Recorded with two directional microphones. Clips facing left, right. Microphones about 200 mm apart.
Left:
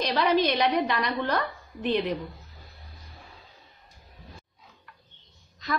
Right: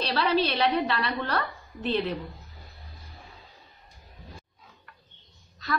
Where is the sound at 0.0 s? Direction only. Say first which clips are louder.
Left 2 dB; 15° left (ahead or behind).